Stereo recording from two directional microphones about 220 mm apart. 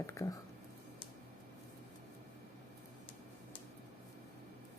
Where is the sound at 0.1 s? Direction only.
15° left (ahead or behind).